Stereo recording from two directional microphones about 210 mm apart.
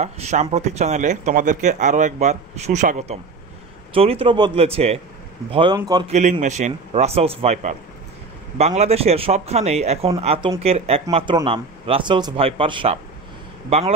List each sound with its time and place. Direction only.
0.0 s a man's voice: 30° right (ahead or behind)
6.0 s speech: 35° right (ahead or behind)